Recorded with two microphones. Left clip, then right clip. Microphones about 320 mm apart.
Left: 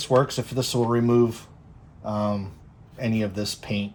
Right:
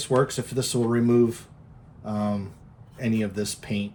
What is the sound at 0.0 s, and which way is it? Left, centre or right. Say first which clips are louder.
Speech: left 2 dB; centre.